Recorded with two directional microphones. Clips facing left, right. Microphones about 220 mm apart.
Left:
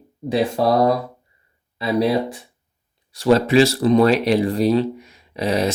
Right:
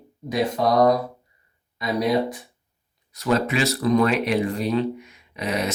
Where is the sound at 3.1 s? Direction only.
30° left (ahead or behind).